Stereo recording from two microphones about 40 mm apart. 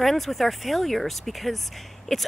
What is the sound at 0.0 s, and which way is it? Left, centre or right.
Speech, centre.